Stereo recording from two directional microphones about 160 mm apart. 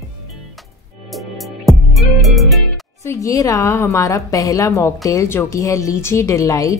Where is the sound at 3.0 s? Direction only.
20° left (ahead or behind).